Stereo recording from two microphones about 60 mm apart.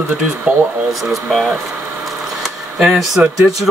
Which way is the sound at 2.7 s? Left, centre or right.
Centre.